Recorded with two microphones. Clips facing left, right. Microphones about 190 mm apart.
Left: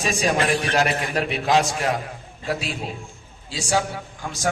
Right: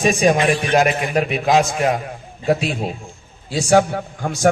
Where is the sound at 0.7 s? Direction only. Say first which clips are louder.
Right 5 dB; 15° right (ahead or behind).